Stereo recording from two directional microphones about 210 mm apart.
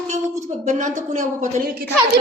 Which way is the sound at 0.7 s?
35° right (ahead or behind).